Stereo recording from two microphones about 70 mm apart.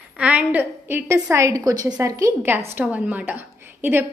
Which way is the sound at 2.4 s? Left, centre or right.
Right.